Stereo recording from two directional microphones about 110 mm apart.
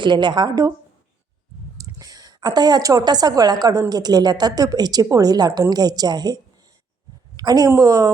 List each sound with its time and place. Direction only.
0.0 s a woman's voice: 45° right (ahead or behind)
1.8 s a woman's voice: 30° right (ahead or behind)